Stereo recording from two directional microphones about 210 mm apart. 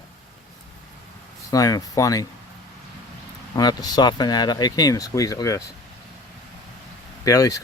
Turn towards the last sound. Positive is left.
turn(degrees=15)  # may be behind; listen again after turning